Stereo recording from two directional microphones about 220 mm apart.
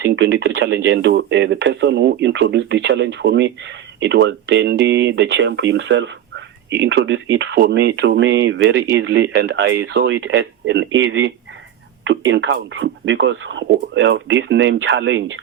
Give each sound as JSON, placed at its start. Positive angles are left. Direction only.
{"t": 0.0, "sound": "speech", "side_deg": -55}